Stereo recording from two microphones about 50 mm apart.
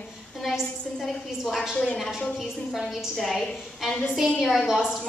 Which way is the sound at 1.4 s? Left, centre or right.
Centre.